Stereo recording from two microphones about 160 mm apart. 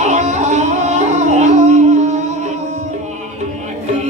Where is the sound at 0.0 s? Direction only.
45° right (ahead or behind).